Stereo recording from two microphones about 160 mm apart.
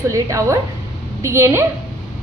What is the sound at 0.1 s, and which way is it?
A woman's voice, 20° right (ahead or behind).